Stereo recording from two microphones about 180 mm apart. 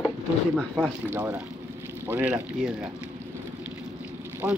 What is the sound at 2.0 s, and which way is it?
Speech, 10° right (ahead or behind).